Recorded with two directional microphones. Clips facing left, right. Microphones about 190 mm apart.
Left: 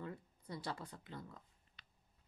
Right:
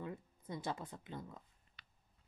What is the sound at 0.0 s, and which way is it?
Speech, 20° right (ahead or behind).